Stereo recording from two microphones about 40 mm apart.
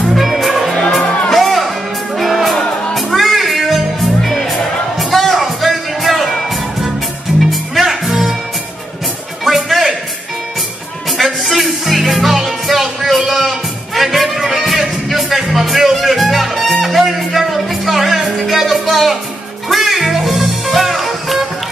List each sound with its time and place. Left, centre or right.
0.1 s music: centre
2.5 s music: centre
3.2 s music: centre
7.8 s music: centre
9.4 s music: centre
11.1 s music: centre